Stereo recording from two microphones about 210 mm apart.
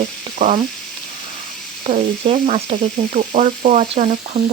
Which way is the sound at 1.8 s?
35° right (ahead or behind).